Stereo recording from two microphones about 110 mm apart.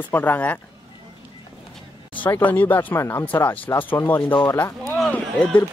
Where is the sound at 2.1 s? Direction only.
15° left (ahead or behind).